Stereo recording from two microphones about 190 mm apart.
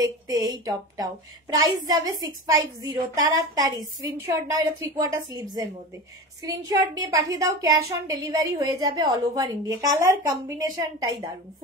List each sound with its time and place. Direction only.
0.0 s a woman's voice: 20° right (ahead or behind)